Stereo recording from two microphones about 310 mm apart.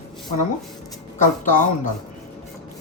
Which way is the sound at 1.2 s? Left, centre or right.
Left.